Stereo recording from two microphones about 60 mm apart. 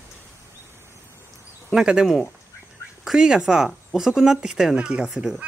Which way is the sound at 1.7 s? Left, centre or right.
Centre.